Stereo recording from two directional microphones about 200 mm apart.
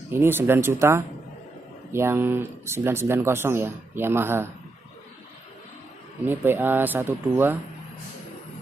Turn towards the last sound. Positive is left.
turn(degrees=-10)  # may be behind; listen again after turning